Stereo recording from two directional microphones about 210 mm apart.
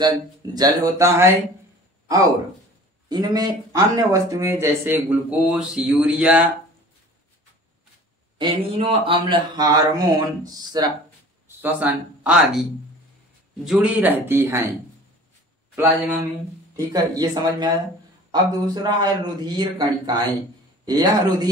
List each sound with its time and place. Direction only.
0.6 s speech: 15° right (ahead or behind)
8.4 s speech: 25° right (ahead or behind)
11.4 s speech: 10° right (ahead or behind)
13.7 s speech: 5° right (ahead or behind)
16.7 s speech: 20° right (ahead or behind)